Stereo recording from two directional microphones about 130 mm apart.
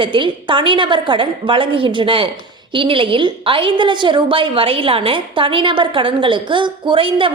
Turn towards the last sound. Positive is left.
turn(degrees=-40)  # may be behind; listen again after turning